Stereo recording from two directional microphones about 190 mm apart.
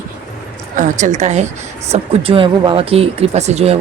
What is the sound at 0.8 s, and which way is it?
Speech, 40° right (ahead or behind).